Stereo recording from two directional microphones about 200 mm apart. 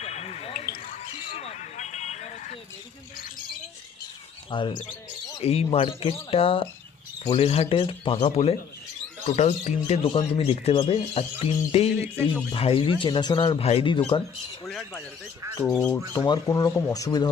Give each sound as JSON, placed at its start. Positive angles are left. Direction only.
{"t": 0.0, "sound": "basketball bounce", "side_deg": 30}
{"t": 0.6, "sound": "a sound", "side_deg": 45}
{"t": 4.5, "sound": "speech", "side_deg": 25}
{"t": 14.7, "sound": "speech", "side_deg": 0}
{"t": 15.7, "sound": "speech", "side_deg": 15}